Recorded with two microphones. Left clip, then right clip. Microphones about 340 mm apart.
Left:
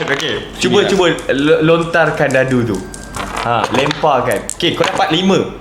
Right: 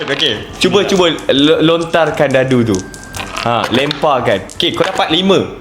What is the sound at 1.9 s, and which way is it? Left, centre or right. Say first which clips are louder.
Speech: right 1 dB; right.